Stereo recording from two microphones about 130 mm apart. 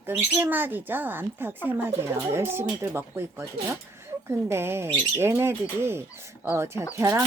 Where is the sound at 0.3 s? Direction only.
20° right (ahead or behind).